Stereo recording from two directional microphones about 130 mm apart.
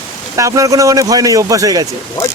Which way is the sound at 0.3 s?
25° right (ahead or behind).